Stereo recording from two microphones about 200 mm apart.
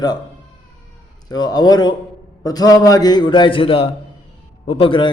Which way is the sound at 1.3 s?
20° left (ahead or behind).